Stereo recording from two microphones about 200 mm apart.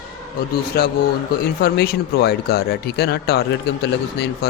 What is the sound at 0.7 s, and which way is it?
Speech, 50° left (ahead or behind).